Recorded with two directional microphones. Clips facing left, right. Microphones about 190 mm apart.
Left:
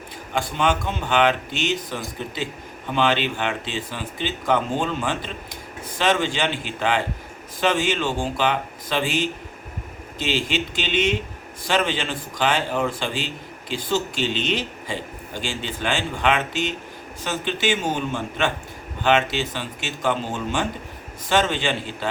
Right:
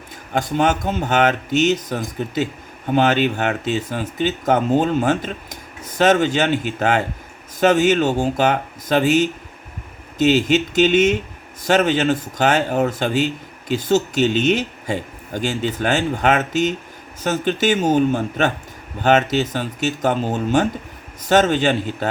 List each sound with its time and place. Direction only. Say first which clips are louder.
0.3 s speech: right 4 dB; 40° right (ahead or behind)